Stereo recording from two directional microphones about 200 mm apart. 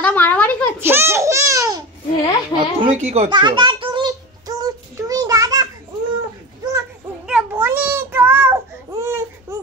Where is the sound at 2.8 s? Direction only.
35° right (ahead or behind).